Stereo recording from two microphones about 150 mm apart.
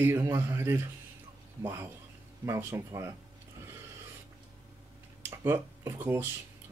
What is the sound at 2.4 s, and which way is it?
Speech, 20° right (ahead or behind).